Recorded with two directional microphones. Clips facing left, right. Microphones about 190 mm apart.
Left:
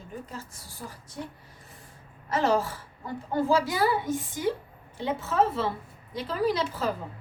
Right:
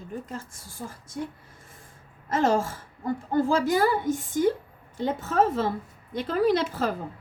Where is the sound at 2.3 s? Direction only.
45° right (ahead or behind).